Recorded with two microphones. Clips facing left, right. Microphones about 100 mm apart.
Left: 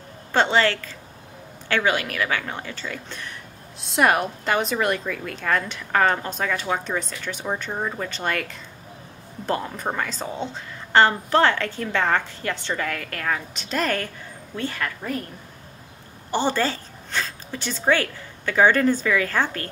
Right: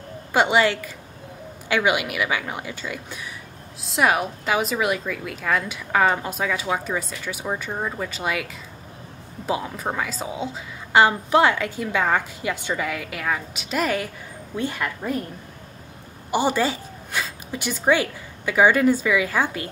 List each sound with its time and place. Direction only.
0.3 s a woman's voice: 10° right (ahead or behind)
9.5 s a woman's voice: 5° right (ahead or behind)
16.3 s a woman's voice: 10° right (ahead or behind)